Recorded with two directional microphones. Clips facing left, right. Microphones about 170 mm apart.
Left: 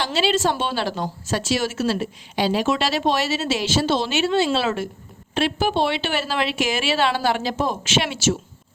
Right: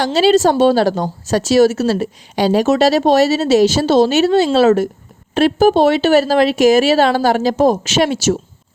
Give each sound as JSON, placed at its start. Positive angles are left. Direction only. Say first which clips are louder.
{"t": 0.0, "sound": "speech", "louder": "right 9 dB", "side_deg": -40}